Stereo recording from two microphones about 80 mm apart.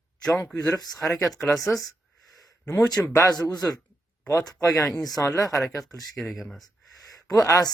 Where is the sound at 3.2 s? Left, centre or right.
Left.